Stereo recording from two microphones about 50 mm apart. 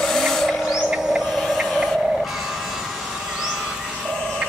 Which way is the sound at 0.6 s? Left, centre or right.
Centre.